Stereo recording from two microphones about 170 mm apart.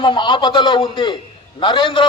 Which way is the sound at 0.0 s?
30° left (ahead or behind).